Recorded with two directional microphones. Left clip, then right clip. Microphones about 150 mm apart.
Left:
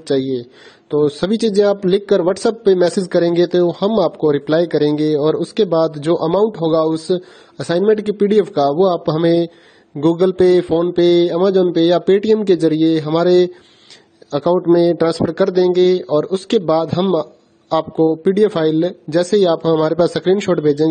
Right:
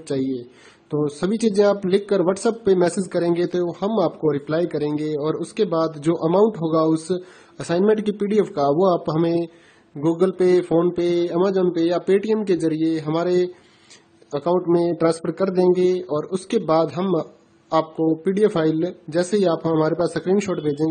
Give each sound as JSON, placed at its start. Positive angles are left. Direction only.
{"t": 0.0, "sound": "a man's voice", "side_deg": 40}